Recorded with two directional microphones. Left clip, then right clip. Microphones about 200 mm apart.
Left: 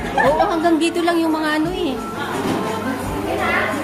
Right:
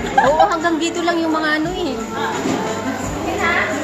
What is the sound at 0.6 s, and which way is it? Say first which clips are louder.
A woman's voice: left 1 dB; 20° left (ahead or behind).